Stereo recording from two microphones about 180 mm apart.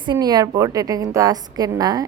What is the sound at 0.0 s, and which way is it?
A woman's voice, 25° right (ahead or behind).